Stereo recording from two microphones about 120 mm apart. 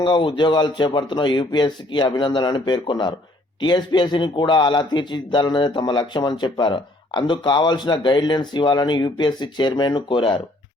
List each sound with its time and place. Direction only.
0.0 s a man's voice: 40° left (ahead or behind)